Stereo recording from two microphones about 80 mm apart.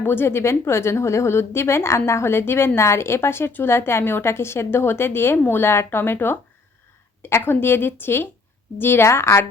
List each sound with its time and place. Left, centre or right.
0.0 s a woman's voice: left